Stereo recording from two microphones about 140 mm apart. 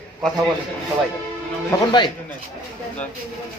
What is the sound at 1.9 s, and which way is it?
Speech, 35° left (ahead or behind).